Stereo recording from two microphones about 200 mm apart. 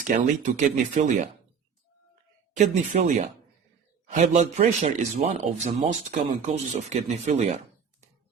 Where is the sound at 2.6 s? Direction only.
35° right (ahead or behind).